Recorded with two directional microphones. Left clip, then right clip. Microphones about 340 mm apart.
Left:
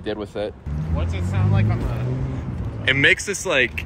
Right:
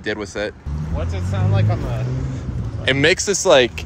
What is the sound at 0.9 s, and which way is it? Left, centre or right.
Speech, right.